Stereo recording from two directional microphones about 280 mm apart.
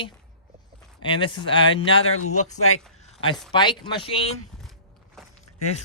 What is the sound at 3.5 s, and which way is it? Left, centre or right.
Speech, centre.